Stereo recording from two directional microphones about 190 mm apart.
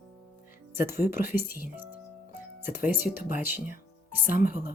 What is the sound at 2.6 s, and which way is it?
Speech, 10° right (ahead or behind).